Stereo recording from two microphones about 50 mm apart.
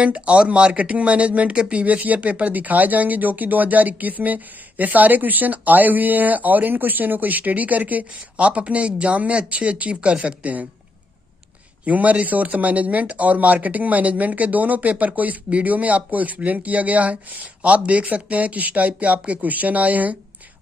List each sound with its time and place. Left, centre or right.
0.0 s speech: right
11.8 s speech: right